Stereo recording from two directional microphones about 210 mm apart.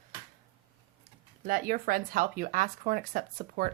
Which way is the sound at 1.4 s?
40° right (ahead or behind).